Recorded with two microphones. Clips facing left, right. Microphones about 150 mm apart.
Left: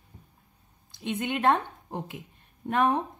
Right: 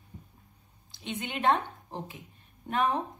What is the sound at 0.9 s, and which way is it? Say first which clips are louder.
A woman's voice: left 6 dB; 55° left (ahead or behind).